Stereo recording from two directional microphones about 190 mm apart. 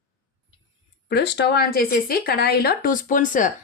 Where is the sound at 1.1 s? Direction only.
60° left (ahead or behind); by 3.5 s 45° left (ahead or behind).